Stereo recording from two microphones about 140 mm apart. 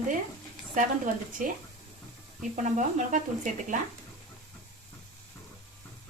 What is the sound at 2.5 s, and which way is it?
Speech, 65° right (ahead or behind).